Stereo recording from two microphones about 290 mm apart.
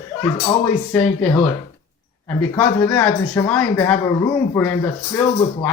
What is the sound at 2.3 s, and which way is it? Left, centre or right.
Speech, centre.